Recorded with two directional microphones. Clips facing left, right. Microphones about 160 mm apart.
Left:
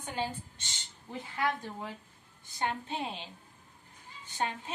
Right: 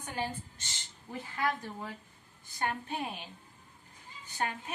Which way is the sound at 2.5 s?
20° left (ahead or behind).